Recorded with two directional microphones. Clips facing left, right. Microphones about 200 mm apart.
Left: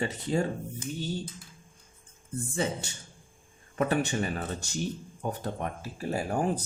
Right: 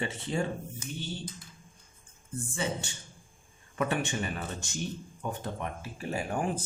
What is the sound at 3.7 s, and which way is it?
Speech, 40° left (ahead or behind).